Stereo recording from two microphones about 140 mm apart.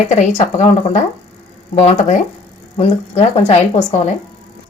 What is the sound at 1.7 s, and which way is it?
Speech, 55° left (ahead or behind).